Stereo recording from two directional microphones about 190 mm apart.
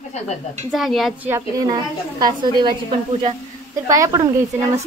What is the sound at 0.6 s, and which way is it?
Speech, centre (ahead or behind).